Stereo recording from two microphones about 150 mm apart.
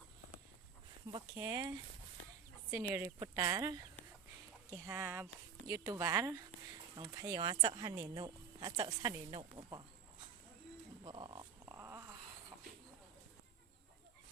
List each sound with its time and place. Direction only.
1.1 s speech: 25° right (ahead or behind)
11.0 s wild animals: 30° right (ahead or behind)
11.7 s wail: 20° right (ahead or behind)